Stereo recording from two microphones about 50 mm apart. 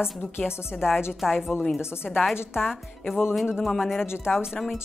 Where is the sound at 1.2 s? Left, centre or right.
Centre.